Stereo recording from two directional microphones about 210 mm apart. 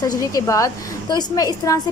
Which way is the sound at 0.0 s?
15° left (ahead or behind).